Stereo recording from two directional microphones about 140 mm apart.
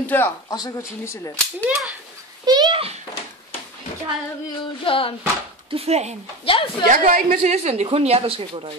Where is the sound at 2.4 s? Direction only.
30° right (ahead or behind).